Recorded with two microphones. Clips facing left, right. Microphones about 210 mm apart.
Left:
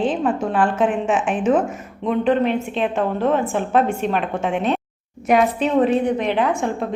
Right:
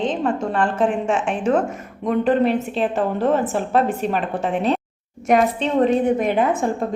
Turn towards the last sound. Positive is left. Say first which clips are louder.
# right 1 dB
turn(degrees=-5)  # may be behind; listen again after turning